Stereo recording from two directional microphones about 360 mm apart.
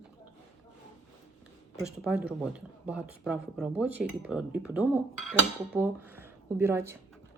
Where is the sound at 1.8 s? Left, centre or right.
Centre.